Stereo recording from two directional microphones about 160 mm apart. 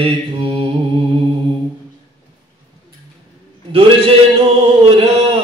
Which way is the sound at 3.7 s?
35° right (ahead or behind).